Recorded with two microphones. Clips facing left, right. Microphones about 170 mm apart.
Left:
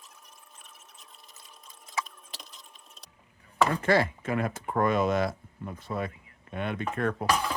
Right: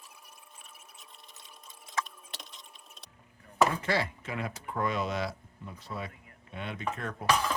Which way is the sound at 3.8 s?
50° left (ahead or behind).